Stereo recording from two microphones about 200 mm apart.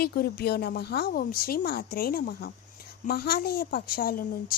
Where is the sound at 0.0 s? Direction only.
50° left (ahead or behind).